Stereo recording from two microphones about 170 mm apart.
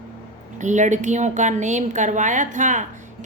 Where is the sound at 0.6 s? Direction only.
45° right (ahead or behind).